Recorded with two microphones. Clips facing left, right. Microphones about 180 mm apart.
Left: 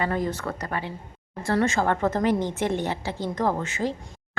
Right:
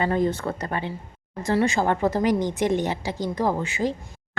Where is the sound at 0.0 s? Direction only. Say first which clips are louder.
Right 4 dB; 25° right (ahead or behind).